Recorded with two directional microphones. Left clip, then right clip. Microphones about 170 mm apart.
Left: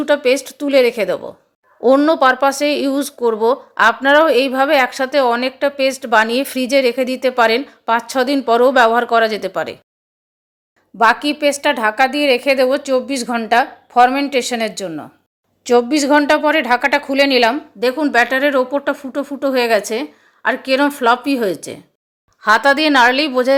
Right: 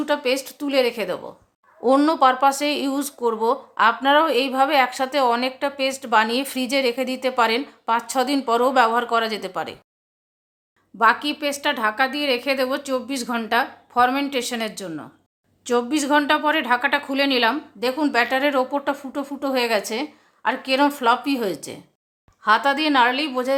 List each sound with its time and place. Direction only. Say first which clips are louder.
0.0 s a woman's voice: left 7 dB; 25° left (ahead or behind)
1.8 s speech: left 5 dB; 15° left (ahead or behind)
10.9 s a woman's voice: left 5 dB; 30° left (ahead or behind)